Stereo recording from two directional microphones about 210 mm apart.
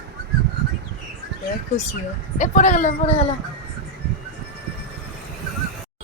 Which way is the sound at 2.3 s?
35° left (ahead or behind).